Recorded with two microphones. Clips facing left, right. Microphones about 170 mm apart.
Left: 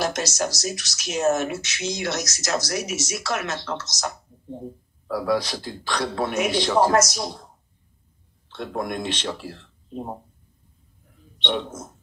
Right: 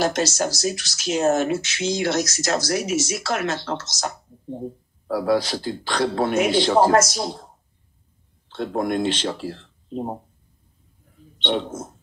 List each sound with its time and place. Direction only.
0.0 s speech: 30° right (ahead or behind)
8.5 s speech: 30° right (ahead or behind)
11.4 s speech: 30° right (ahead or behind)